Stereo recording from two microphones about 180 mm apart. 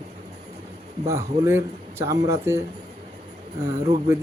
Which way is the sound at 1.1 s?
15° right (ahead or behind).